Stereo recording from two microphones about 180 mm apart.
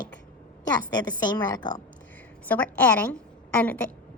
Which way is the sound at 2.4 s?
10° left (ahead or behind).